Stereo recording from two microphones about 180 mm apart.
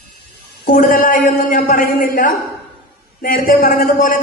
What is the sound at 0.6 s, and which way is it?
A man's voice, 50° left (ahead or behind).